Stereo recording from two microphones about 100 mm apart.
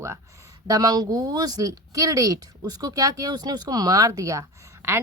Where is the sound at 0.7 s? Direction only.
40° right (ahead or behind).